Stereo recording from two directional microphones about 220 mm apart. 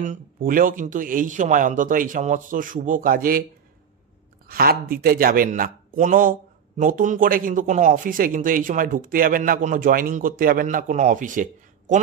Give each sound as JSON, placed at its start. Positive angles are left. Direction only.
{"t": 0.0, "sound": "speech", "side_deg": -35}
{"t": 4.5, "sound": "speech", "side_deg": -40}